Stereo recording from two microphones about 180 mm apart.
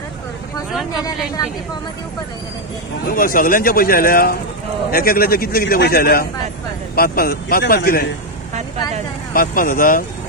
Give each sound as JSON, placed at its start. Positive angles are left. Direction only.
{"t": 3.1, "sound": "a man's voice", "side_deg": 50}
{"t": 9.3, "sound": "a man's voice", "side_deg": 50}